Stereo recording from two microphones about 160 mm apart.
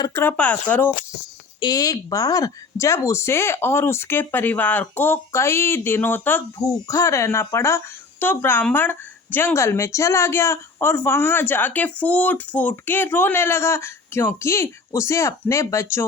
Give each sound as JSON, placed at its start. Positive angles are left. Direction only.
{"t": 0.0, "sound": "a woman's voice", "side_deg": 15}
{"t": 1.6, "sound": "a woman's voice", "side_deg": 25}